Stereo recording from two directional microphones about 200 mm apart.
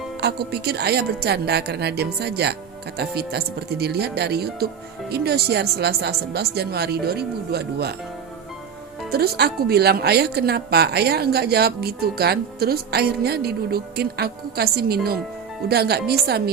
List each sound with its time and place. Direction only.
0.2 s speech: 55° right (ahead or behind)
9.1 s speech: 50° right (ahead or behind)